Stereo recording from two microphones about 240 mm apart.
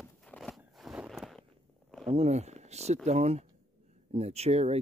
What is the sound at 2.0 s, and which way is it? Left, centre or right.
Speech, right.